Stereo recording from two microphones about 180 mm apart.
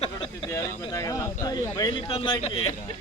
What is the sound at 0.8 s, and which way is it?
Speech, 20° left (ahead or behind).